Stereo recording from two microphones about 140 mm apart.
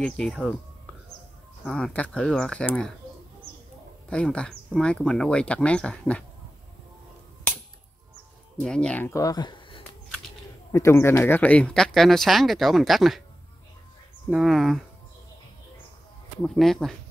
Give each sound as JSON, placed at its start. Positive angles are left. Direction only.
{"t": 0.0, "sound": "speech", "side_deg": 5}
{"t": 1.6, "sound": "speech", "side_deg": 5}
{"t": 4.1, "sound": "speech", "side_deg": 5}
{"t": 8.5, "sound": "speech", "side_deg": 5}
{"t": 9.1, "sound": "speech", "side_deg": 25}
{"t": 10.7, "sound": "speech", "side_deg": 20}
{"t": 14.3, "sound": "speech", "side_deg": 0}
{"t": 16.4, "sound": "speech", "side_deg": 5}